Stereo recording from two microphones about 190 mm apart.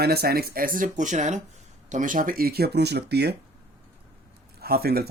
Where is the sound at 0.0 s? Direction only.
55° right (ahead or behind).